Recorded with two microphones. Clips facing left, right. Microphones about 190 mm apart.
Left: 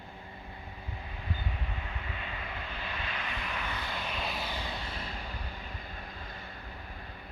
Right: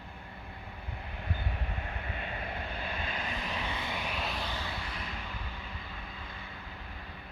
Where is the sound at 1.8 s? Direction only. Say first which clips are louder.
Right 2 dB; 50° right (ahead or behind).